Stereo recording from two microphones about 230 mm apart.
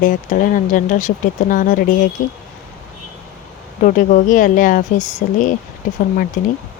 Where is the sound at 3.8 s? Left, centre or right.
Left.